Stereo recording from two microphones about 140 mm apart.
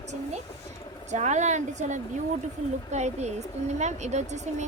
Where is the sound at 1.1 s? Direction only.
55° right (ahead or behind).